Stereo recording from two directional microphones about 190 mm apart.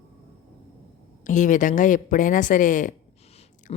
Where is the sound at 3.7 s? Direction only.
35° left (ahead or behind).